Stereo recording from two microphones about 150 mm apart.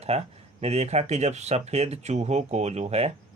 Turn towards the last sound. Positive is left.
turn(degrees=-45)  # may be behind; listen again after turning